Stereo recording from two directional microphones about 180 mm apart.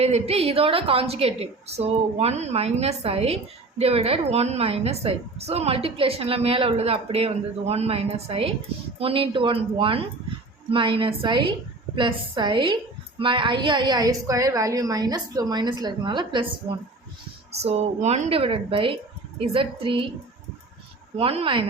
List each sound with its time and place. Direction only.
0.0 s a woman's voice: 35° right (ahead or behind)
21.2 s a woman's voice: 30° right (ahead or behind)